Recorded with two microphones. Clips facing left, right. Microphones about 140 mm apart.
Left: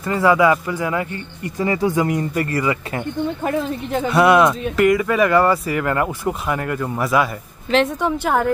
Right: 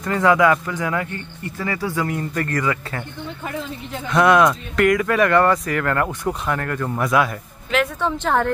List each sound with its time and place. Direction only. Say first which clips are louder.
0.0 s speech: left 1 dB; 5° left (ahead or behind)
1.4 s speech: left 6 dB; 20° left (ahead or behind)
4.1 s speech: left 1 dB; 5° left (ahead or behind)